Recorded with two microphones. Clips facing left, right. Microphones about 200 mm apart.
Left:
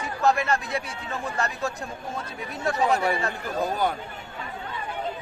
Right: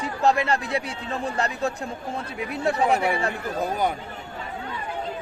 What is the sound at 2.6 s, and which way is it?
Speech, 30° right (ahead or behind).